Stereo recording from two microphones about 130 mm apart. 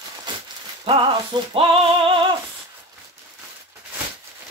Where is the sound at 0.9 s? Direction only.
40° right (ahead or behind).